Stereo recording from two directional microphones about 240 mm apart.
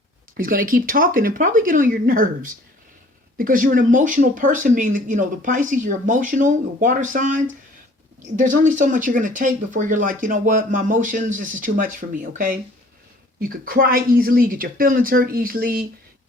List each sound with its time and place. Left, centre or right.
0.3 s speech: right